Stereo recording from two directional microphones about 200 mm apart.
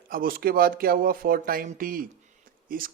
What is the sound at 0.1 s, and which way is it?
Speech, 45° right (ahead or behind).